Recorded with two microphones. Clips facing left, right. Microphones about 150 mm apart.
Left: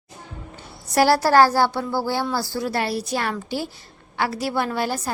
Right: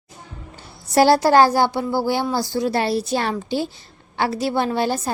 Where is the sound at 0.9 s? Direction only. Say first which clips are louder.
Right 2 dB; 25° right (ahead or behind).